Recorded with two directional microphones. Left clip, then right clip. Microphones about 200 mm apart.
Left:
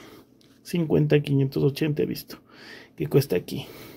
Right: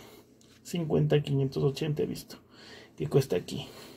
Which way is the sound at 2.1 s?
30° left (ahead or behind).